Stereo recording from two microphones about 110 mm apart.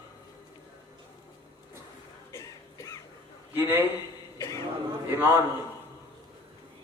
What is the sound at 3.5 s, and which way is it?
Speech, 20° right (ahead or behind).